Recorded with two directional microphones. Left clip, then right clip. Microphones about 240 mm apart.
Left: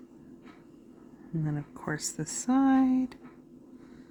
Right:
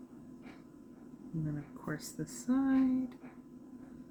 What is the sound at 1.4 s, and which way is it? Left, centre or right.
Speech, left.